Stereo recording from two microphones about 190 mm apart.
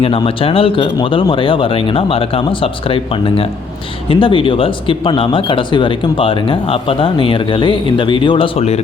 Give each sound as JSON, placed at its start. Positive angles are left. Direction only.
{"t": 0.0, "sound": "speech", "side_deg": 30}